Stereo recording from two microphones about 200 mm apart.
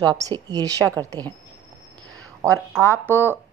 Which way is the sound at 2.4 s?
15° right (ahead or behind).